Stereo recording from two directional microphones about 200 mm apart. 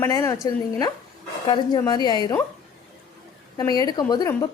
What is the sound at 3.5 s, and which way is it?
Speech, 20° left (ahead or behind).